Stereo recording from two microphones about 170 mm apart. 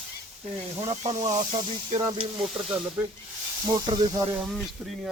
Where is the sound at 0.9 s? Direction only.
40° right (ahead or behind).